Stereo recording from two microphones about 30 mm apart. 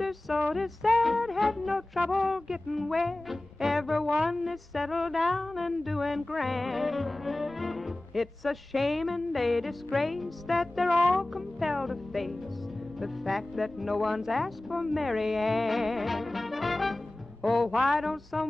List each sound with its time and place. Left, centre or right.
0.0 s music: centre
11.8 s speech: centre
13.0 s music: centre